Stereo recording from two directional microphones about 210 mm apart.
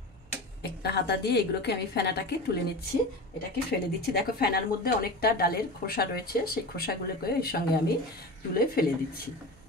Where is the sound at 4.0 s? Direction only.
45° left (ahead or behind).